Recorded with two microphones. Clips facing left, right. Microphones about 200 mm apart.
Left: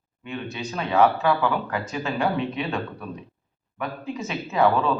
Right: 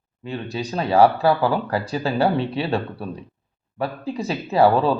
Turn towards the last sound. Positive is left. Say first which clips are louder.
# right 4 dB
turn(degrees=-35)  # may be behind; listen again after turning